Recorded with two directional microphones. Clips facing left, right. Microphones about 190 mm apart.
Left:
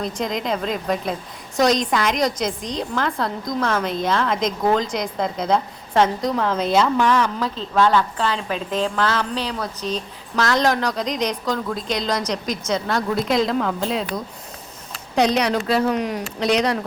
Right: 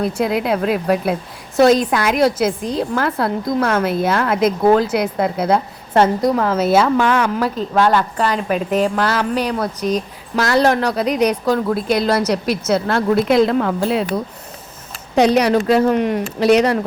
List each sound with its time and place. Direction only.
0.0 s a woman's voice: 10° right (ahead or behind)
8.4 s speech: 55° right (ahead or behind)
8.7 s a woman's voice: 10° right (ahead or behind)
15.1 s a woman's voice: 5° right (ahead or behind)